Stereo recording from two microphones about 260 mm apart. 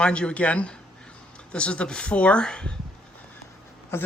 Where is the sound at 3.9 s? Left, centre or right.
Centre.